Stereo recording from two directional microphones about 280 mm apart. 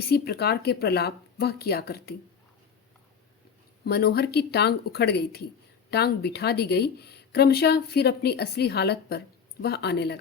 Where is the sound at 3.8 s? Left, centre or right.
Left.